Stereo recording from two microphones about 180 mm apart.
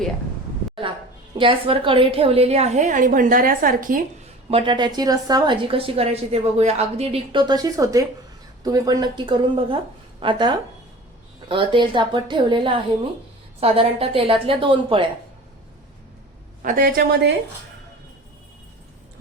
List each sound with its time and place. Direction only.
1.4 s a woman's voice: 30° right (ahead or behind); by 4.0 s 50° right (ahead or behind)
4.5 s a woman's voice: 25° right (ahead or behind)
16.6 s a woman's voice: 50° right (ahead or behind); by 17.3 s 65° right (ahead or behind)